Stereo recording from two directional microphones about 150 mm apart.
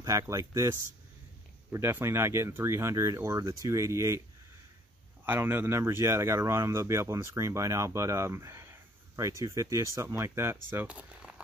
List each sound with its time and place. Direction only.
0.3 s speech: 20° right (ahead or behind)
5.2 s speech: 15° right (ahead or behind)